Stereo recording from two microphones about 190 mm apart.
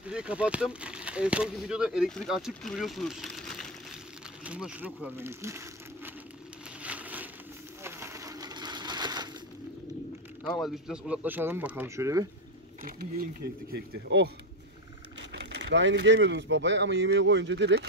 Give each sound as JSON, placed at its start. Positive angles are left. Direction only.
{"t": 0.0, "sound": "speech", "side_deg": -5}
{"t": 6.8, "sound": "a sound", "side_deg": -5}
{"t": 7.8, "sound": "sewing machine", "side_deg": -15}
{"t": 10.4, "sound": "speech", "side_deg": 0}
{"t": 12.8, "sound": "speech", "side_deg": -50}
{"t": 13.7, "sound": "speech", "side_deg": -60}
{"t": 15.3, "sound": "speech", "side_deg": -70}